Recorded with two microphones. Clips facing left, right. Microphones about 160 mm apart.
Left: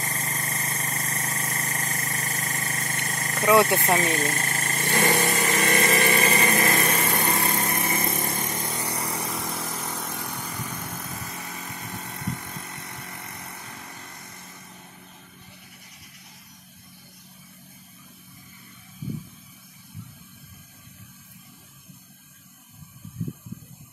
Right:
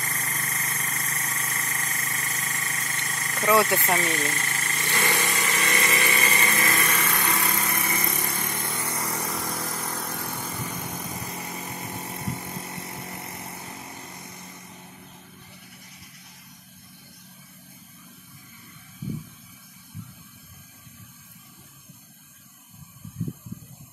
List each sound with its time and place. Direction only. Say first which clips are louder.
0.0 s engine: left 2 dB; 35° left (ahead or behind)
3.3 s speech: left 2 dB; 15° left (ahead or behind)
4.0 s speech: left 3 dB; 50° left (ahead or behind)
5.1 s engine: left 4 dB; 50° left (ahead or behind)
6.3 s lawn mower: left 4 dB; 35° left (ahead or behind)
7.3 s vehicle: left 2 dB; 50° left (ahead or behind)
8.6 s vehicle: left 1 dB; 15° left (ahead or behind)
9.2 s vehicle: even; centre (ahead or behind)
10.2 s vehicle: right 1 dB; 10° right (ahead or behind)
11.1 s vehicle: right 2 dB; centre (ahead or behind)
11.4 s vehicle: right 2 dB; 20° right (ahead or behind)